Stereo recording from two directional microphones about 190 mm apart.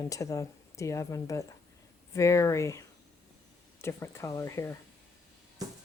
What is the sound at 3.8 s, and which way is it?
Speech, 15° left (ahead or behind).